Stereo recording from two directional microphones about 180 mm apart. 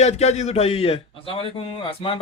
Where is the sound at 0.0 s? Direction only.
40° left (ahead or behind).